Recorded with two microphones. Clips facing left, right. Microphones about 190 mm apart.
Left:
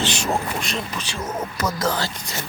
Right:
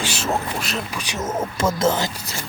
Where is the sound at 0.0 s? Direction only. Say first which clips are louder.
Left 1 dB; 5° right (ahead or behind).